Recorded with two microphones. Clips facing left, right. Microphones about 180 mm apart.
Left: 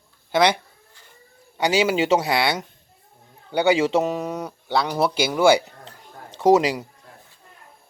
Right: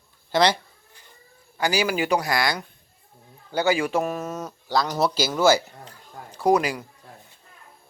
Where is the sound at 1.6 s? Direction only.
20° left (ahead or behind).